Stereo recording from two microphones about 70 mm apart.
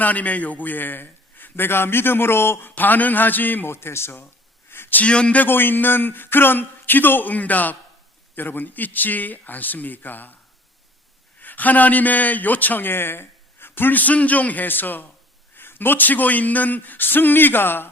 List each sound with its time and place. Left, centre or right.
0.0 s a man's voice: left
4.7 s a sound: left
5.0 s a man's voice: centre
11.3 s a man's voice: left